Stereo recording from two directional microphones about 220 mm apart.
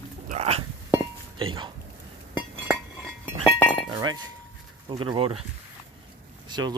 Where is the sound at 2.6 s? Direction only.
5° right (ahead or behind).